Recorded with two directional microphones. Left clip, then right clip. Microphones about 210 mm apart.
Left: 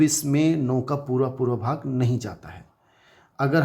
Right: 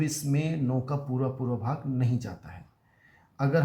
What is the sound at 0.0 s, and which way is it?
Speech, 40° left (ahead or behind).